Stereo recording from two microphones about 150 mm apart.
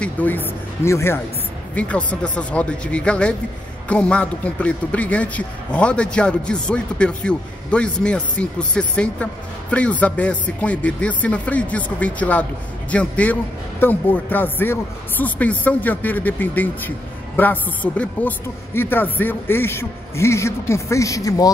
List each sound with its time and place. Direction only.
0.0 s a man's voice: 10° left (ahead or behind)